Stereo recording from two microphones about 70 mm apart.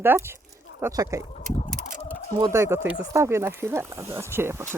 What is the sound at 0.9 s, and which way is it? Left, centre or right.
Speech, right.